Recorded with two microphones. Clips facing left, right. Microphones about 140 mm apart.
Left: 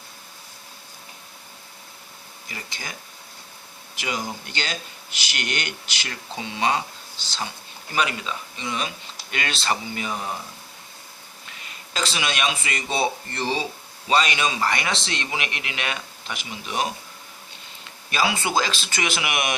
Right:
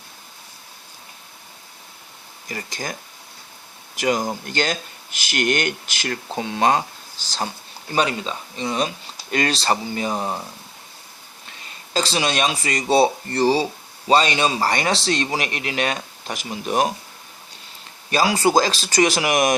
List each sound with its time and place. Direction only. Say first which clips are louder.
2.5 s speech: right 7 dB; 45° right (ahead or behind)
3.9 s speech: right 8 dB; 45° right (ahead or behind)
7.9 s speech: right 4 dB; 30° right (ahead or behind)
11.9 s speech: right 5 dB; 35° right (ahead or behind)
18.1 s speech: right 6 dB; 40° right (ahead or behind)